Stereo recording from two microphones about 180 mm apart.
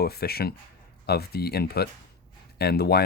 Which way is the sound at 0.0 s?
60° left (ahead or behind).